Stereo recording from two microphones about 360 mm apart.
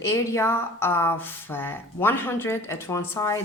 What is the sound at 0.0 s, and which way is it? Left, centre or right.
A woman's voice, centre.